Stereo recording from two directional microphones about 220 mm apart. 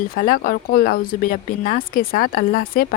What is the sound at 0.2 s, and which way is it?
A woman's voice, 40° left (ahead or behind).